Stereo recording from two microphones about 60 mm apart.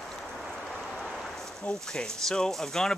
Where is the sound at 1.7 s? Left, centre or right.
Centre.